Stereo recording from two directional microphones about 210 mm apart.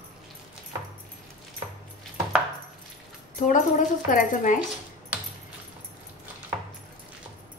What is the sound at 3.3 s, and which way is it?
A woman's voice, 40° left (ahead or behind).